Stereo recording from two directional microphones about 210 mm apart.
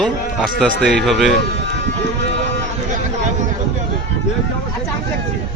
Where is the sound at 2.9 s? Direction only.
35° right (ahead or behind).